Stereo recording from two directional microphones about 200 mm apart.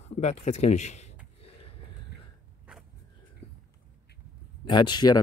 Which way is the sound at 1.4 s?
30° left (ahead or behind).